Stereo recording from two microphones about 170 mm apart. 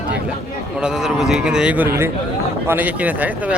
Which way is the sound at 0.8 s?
5° right (ahead or behind).